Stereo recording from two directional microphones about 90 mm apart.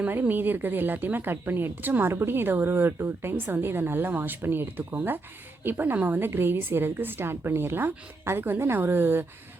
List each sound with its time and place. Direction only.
0.0 s a woman's voice: 20° right (ahead or behind)